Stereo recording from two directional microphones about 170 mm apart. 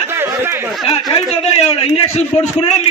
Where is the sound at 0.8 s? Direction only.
35° left (ahead or behind).